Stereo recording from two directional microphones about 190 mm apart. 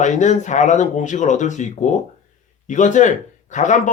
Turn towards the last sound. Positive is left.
turn(degrees=40)  # may be behind; listen again after turning